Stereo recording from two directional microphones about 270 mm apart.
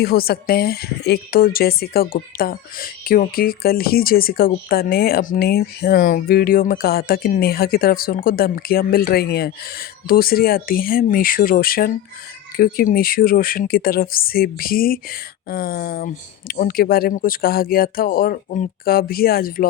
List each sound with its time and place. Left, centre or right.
0.0 s speech: left